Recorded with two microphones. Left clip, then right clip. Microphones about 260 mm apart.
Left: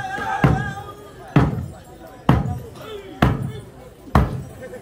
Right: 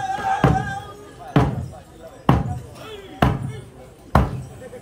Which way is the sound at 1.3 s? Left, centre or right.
Right.